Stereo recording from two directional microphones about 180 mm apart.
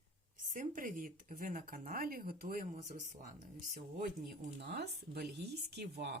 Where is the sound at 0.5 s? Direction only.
45° right (ahead or behind).